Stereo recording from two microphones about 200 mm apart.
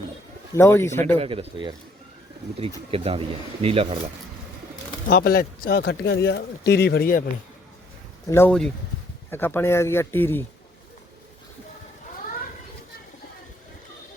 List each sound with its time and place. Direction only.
0.5 s speech: 10° left (ahead or behind)
1.2 s speech: 30° right (ahead or behind)
5.0 s speech: 45° left (ahead or behind)
8.3 s speech: 10° left (ahead or behind)